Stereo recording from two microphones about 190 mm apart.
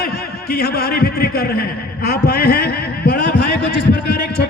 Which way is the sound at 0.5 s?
55° left (ahead or behind).